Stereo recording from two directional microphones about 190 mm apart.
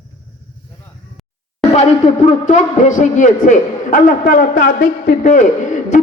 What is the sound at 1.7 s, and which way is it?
A man's voice, 35° left (ahead or behind).